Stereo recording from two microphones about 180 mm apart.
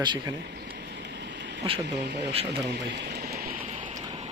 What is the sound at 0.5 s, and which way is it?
Vehicle, 70° right (ahead or behind).